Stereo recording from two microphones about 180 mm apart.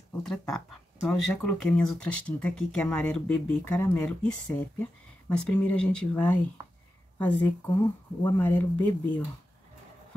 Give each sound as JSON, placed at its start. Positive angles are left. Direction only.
{"t": 0.2, "sound": "speech", "side_deg": 0}